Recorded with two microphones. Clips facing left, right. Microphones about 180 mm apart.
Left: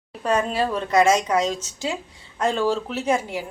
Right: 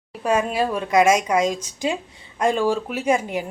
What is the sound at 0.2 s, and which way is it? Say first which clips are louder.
A woman's voice: right 1 dB; 10° right (ahead or behind).